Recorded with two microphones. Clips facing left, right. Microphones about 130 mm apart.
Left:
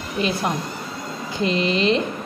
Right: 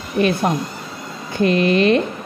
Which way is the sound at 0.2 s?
60° right (ahead or behind).